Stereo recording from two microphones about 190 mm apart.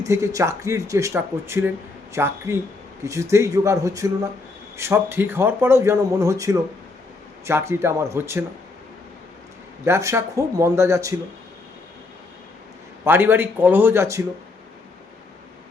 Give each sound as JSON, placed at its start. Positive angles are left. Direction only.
{"t": 0.0, "sound": "speech", "side_deg": -15}
{"t": 9.8, "sound": "speech", "side_deg": -15}
{"t": 13.1, "sound": "speech", "side_deg": -10}